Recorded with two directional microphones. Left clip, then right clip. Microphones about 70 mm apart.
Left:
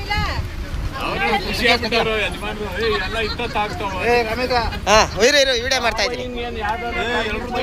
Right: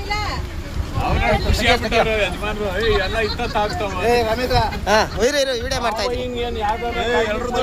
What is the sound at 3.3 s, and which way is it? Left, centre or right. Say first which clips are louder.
Speech: right 1 dB; right.